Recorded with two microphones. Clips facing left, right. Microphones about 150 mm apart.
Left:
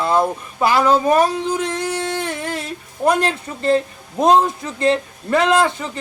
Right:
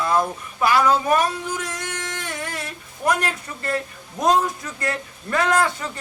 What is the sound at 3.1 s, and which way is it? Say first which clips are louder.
A man's voice: left 5 dB; 30° left (ahead or behind).